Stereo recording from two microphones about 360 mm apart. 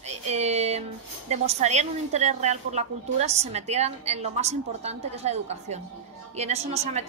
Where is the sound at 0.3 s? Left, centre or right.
Centre.